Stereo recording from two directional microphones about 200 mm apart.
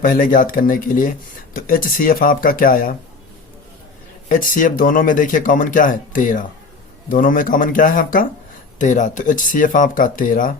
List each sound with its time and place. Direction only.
0.0 s speech: 45° left (ahead or behind)
4.3 s speech: 45° left (ahead or behind)